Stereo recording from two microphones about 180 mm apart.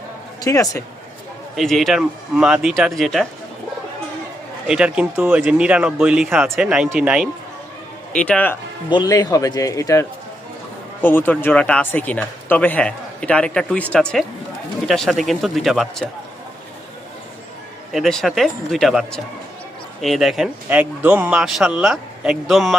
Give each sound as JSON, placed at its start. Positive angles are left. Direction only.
{"t": 0.4, "sound": "speech", "side_deg": 20}
{"t": 1.5, "sound": "speech", "side_deg": 0}
{"t": 4.6, "sound": "speech", "side_deg": -5}
{"t": 8.1, "sound": "speech", "side_deg": 5}
{"t": 8.9, "sound": "a man's voice", "side_deg": 20}
{"t": 17.9, "sound": "speech", "side_deg": 0}